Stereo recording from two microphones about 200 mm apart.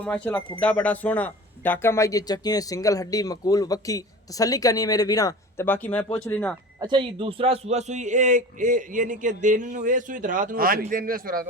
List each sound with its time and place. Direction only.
0.0 s speech: 5° left (ahead or behind)
6.7 s a man's voice: 25° right (ahead or behind); by 11.4 s 45° right (ahead or behind)